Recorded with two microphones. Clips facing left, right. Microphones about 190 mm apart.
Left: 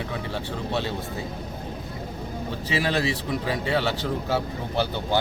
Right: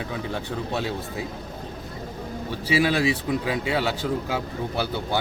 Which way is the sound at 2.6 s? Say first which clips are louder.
Right 4 dB; 10° right (ahead or behind).